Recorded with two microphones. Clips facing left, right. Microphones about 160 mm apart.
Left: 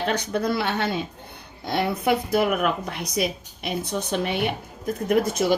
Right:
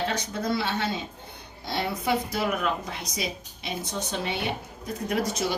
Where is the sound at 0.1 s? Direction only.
60° left (ahead or behind).